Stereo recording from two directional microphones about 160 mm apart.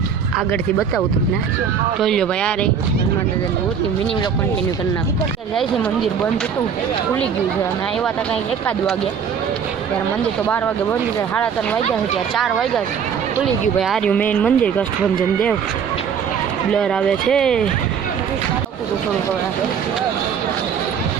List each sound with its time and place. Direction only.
2.0 s speech: 5° left (ahead or behind)
12.4 s speech: centre (ahead or behind)
16.7 s speech: 5° left (ahead or behind)